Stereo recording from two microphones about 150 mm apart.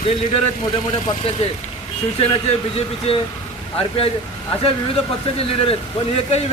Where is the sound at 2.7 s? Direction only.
40° left (ahead or behind).